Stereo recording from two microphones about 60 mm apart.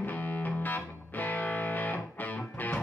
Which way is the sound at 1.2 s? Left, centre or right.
Left.